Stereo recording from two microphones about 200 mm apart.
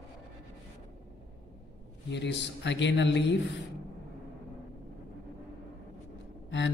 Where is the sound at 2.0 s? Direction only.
60° left (ahead or behind).